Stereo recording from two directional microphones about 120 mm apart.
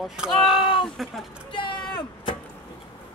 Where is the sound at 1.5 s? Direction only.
40° left (ahead or behind).